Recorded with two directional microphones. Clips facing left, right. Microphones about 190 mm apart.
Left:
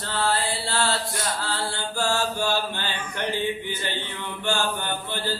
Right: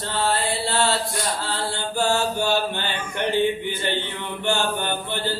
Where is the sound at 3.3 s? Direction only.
55° right (ahead or behind).